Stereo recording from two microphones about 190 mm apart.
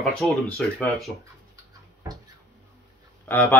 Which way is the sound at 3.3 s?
10° left (ahead or behind).